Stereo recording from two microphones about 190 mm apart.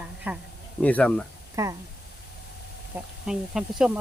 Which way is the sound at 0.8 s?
5° left (ahead or behind).